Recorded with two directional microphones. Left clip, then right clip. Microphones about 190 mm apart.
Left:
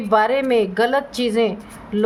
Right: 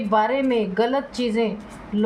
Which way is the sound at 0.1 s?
55° left (ahead or behind).